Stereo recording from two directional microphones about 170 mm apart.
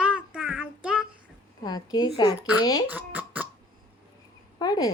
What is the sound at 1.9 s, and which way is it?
Speech, 25° left (ahead or behind).